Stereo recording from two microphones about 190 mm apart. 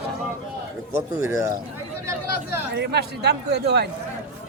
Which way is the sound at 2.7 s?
65° right (ahead or behind).